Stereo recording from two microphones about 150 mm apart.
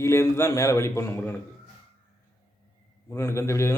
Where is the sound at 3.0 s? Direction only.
20° left (ahead or behind).